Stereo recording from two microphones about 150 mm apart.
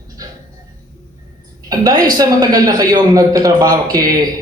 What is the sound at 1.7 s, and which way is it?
A man's voice, 25° right (ahead or behind).